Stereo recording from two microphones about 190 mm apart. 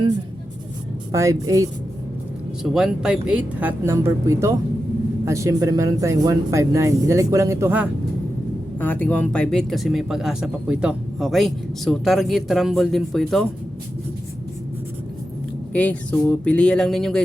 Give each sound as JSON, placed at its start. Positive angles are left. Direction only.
{"t": 1.1, "sound": "speech", "side_deg": -15}
{"t": 2.6, "sound": "speech", "side_deg": -5}
{"t": 8.8, "sound": "speech", "side_deg": 10}
{"t": 15.7, "sound": "speech", "side_deg": 5}